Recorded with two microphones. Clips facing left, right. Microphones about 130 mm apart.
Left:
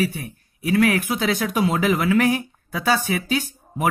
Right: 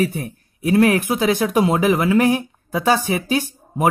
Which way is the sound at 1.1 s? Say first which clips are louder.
Right 5 dB; 40° right (ahead or behind).